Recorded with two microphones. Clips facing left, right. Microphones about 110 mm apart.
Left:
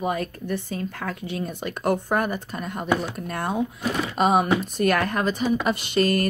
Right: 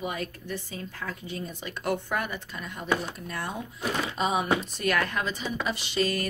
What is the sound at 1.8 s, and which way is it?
Speech, 45° left (ahead or behind).